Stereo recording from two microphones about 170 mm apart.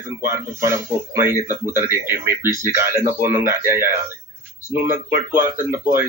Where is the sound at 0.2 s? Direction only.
15° right (ahead or behind).